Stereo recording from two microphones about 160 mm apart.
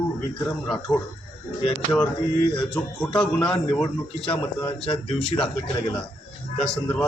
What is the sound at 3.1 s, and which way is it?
Speech, 5° left (ahead or behind).